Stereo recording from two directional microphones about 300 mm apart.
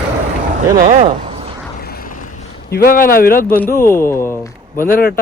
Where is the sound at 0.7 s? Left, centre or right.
Right.